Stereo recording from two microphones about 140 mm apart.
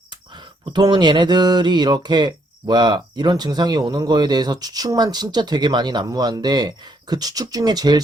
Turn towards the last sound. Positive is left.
turn(degrees=-30)  # may be behind; listen again after turning